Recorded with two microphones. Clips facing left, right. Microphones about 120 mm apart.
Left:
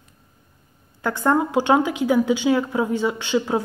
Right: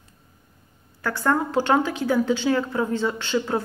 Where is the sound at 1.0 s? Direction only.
20° left (ahead or behind).